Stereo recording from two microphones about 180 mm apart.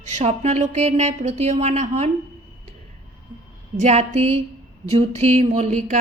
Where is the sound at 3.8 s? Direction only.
40° right (ahead or behind).